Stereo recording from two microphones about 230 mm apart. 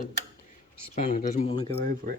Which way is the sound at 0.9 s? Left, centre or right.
Left.